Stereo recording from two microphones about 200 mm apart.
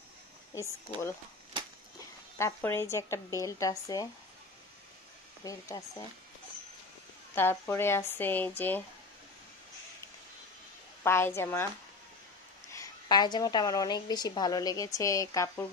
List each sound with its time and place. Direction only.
2.0 s speech: 15° left (ahead or behind)
5.4 s speech: 15° left (ahead or behind)
7.3 s speech: 10° left (ahead or behind)
11.1 s speech: 10° left (ahead or behind)
12.7 s a woman's voice: 20° left (ahead or behind)